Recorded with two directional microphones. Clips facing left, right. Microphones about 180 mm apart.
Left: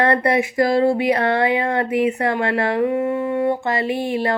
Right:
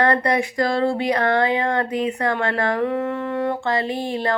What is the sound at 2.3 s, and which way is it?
Speech, 10° left (ahead or behind).